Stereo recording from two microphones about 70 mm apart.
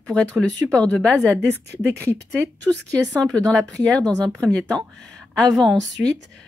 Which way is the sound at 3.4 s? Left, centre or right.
Centre.